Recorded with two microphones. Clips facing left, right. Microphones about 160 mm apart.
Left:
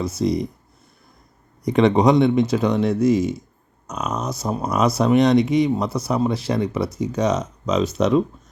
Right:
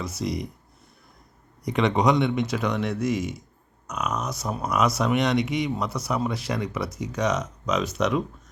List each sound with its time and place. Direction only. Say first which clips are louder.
0.0 s speech: left 8 dB; 30° left (ahead or behind)
1.6 s speech: left 6 dB; 30° left (ahead or behind)